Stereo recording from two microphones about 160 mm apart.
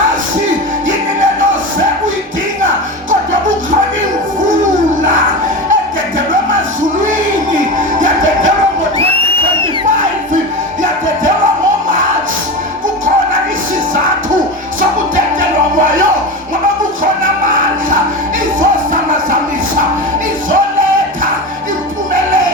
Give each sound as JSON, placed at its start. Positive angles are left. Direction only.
{"t": 7.9, "sound": "music", "side_deg": -55}